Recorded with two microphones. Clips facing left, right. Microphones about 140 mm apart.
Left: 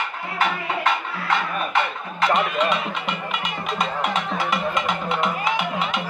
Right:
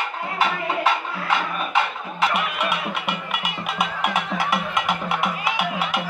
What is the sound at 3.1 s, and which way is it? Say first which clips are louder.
Music: even; 65° right (ahead or behind).